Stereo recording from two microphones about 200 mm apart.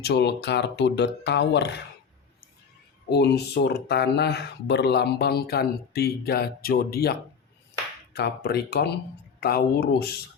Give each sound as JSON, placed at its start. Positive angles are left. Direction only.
{"t": 0.0, "sound": "speech", "side_deg": 60}
{"t": 3.1, "sound": "speech", "side_deg": 55}